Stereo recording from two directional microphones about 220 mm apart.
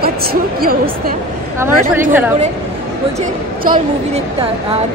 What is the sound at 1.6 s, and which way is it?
Speech, 10° right (ahead or behind).